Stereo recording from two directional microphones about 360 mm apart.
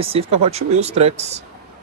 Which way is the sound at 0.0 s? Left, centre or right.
Centre.